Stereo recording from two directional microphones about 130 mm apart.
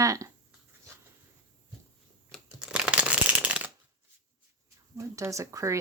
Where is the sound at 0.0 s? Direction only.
25° right (ahead or behind).